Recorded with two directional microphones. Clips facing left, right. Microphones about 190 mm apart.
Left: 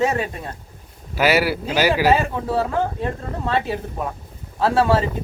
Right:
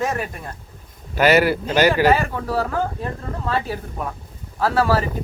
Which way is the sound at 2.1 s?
25° left (ahead or behind).